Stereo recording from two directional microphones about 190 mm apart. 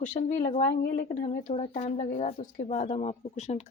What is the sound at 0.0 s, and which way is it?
Speech, 40° left (ahead or behind).